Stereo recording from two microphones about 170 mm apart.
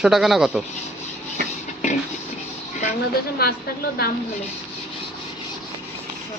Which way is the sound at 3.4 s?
65° left (ahead or behind).